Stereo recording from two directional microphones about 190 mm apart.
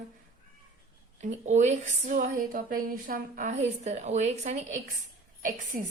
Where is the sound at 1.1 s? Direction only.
35° right (ahead or behind).